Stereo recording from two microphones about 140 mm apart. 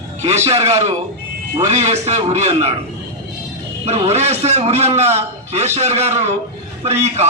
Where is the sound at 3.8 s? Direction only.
50° right (ahead or behind).